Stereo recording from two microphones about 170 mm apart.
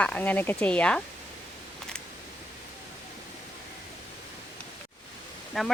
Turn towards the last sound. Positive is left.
turn(degrees=0)  # may be behind; listen again after turning